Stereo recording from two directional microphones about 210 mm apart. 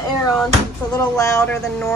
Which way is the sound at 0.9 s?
15° left (ahead or behind).